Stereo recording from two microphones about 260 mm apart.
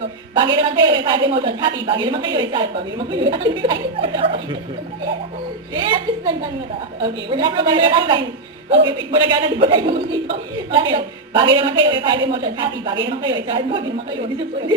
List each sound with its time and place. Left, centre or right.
0.3 s a woman's voice: centre
5.7 s a woman's voice: centre